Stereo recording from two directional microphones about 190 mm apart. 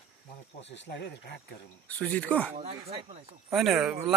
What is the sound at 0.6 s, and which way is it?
Speech, 70° left (ahead or behind).